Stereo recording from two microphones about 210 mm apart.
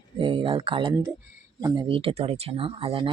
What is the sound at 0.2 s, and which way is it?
Speech, 25° right (ahead or behind).